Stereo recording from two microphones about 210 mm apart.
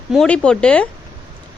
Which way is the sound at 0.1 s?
5° left (ahead or behind).